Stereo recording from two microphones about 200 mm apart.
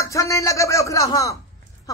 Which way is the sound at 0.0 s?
15° left (ahead or behind).